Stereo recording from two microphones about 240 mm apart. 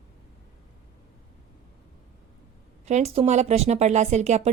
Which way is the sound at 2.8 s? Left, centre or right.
Right.